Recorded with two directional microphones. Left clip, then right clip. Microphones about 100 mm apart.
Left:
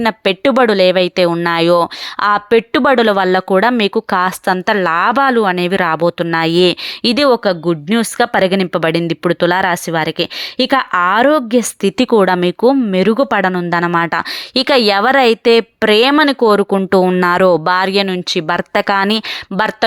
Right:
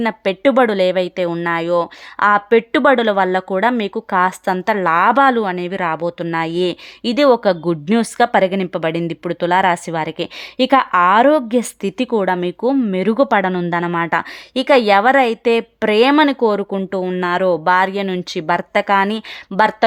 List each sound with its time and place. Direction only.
0.0 s a woman's voice: 25° left (ahead or behind)
1.5 s a woman's voice: 45° left (ahead or behind); by 5.5 s 20° left (ahead or behind)
5.5 s a woman's voice: 40° left (ahead or behind)
7.3 s a woman's voice: 20° left (ahead or behind); by 13.1 s 35° left (ahead or behind)
13.1 s speech: 20° left (ahead or behind)
17.1 s speech: 50° left (ahead or behind)
17.7 s a woman's voice: 35° left (ahead or behind)